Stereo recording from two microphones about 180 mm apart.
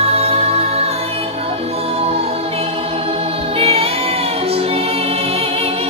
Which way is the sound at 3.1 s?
35° right (ahead or behind).